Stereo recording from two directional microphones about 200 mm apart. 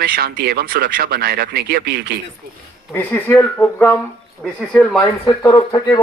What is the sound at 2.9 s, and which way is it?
Speech, 10° left (ahead or behind).